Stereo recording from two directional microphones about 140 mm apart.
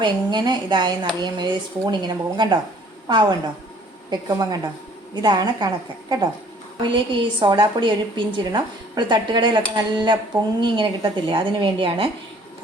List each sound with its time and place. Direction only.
0.0 s a woman's voice: 35° right (ahead or behind)